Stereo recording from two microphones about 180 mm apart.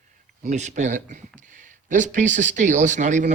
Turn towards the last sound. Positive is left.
turn(degrees=-40)  # may be behind; listen again after turning